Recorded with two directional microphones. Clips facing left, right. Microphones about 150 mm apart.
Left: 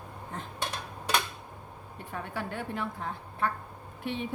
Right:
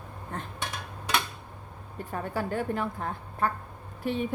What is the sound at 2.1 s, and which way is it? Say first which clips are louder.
A woman's voice: right 5 dB; 40° right (ahead or behind).